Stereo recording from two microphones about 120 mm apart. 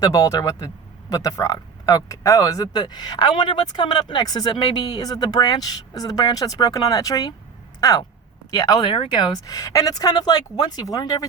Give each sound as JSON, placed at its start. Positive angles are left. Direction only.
{"t": 0.0, "sound": "speech", "side_deg": 30}
{"t": 8.9, "sound": "speech", "side_deg": 45}